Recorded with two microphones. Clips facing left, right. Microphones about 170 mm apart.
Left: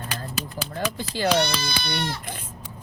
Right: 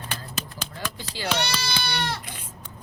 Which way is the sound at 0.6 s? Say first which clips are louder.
Left 5 dB; 50° left (ahead or behind).